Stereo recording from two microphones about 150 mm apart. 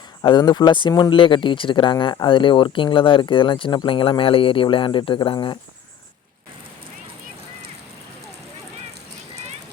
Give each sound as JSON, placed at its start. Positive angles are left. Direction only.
{"t": 0.2, "sound": "speech", "side_deg": 30}